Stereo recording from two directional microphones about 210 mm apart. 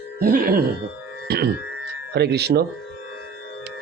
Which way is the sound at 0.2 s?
45° right (ahead or behind).